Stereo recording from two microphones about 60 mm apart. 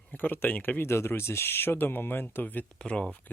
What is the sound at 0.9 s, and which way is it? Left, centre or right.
Speech, left.